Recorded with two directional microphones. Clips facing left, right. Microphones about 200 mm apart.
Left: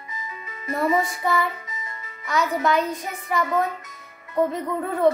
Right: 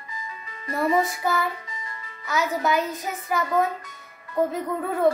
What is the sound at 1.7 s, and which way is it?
Music, 20° left (ahead or behind).